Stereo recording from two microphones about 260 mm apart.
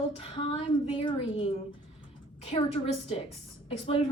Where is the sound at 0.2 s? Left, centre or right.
Centre.